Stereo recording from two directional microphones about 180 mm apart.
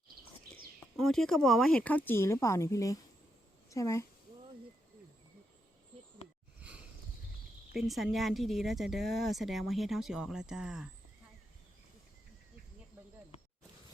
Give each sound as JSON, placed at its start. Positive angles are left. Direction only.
{"t": 0.9, "sound": "a child's voice", "side_deg": 0}
{"t": 6.6, "sound": "a sound", "side_deg": -5}
{"t": 7.7, "sound": "speech", "side_deg": 0}